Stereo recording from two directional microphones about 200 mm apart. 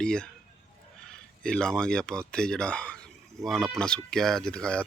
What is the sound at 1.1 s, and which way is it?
Speech, 5° left (ahead or behind).